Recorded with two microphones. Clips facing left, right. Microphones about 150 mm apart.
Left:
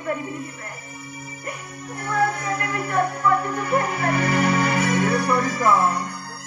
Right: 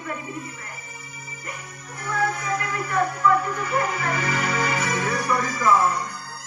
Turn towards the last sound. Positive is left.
turn(degrees=60)  # may be behind; listen again after turning